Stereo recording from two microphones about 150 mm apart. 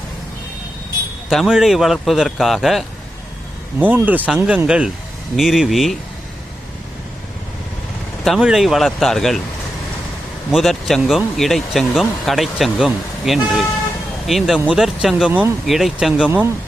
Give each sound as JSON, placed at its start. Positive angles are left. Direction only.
{"t": 1.3, "sound": "speech", "side_deg": 0}
{"t": 3.8, "sound": "speech", "side_deg": -10}
{"t": 8.2, "sound": "speech", "side_deg": 0}
{"t": 10.5, "sound": "speech", "side_deg": 0}
{"t": 15.3, "sound": "speech", "side_deg": -15}
{"t": 15.6, "sound": "speech", "side_deg": 0}